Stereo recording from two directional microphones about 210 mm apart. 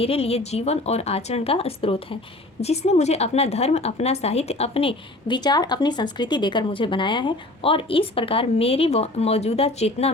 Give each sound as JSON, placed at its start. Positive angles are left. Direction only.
{"t": 0.0, "sound": "a woman's voice", "side_deg": 30}